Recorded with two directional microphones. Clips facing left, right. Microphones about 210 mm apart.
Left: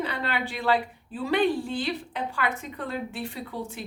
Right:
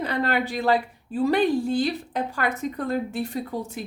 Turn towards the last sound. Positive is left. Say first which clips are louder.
# right 5 dB
turn(degrees=-40)  # may be behind; listen again after turning